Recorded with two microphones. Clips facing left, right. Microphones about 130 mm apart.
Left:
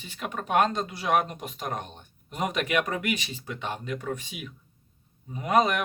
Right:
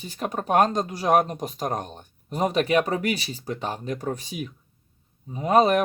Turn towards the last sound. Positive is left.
turn(degrees=-35)  # may be behind; listen again after turning